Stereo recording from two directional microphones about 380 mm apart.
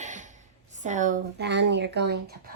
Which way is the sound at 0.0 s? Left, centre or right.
Centre.